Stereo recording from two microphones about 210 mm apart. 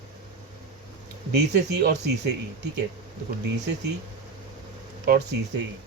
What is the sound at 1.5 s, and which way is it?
Speech, 50° right (ahead or behind).